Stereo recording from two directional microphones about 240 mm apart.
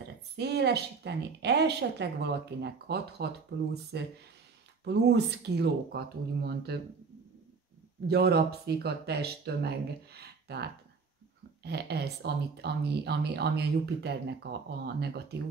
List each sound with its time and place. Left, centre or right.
0.4 s speech: right
8.1 s speech: right